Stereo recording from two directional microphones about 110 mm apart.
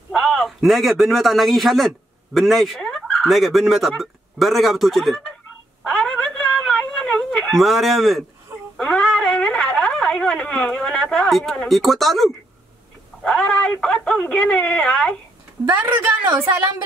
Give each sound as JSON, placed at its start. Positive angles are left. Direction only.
{"t": 0.1, "sound": "a man's voice", "side_deg": 5}
{"t": 5.9, "sound": "a sound", "side_deg": 5}
{"t": 13.2, "sound": "speech", "side_deg": 10}
{"t": 15.8, "sound": "a woman's voice", "side_deg": -20}